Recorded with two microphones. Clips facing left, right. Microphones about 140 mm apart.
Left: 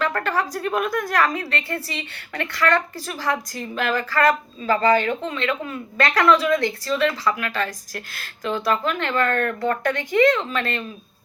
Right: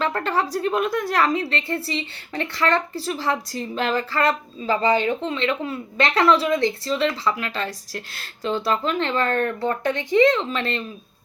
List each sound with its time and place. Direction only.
0.0 s a woman's voice: 25° right (ahead or behind)